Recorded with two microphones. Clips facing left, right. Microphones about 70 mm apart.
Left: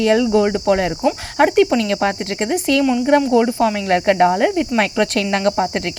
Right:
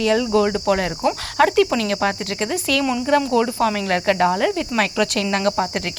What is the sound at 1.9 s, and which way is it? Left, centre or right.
Cricket, left.